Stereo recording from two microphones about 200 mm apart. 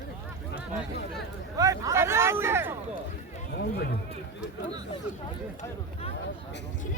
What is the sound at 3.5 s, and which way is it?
Speech, 50° left (ahead or behind).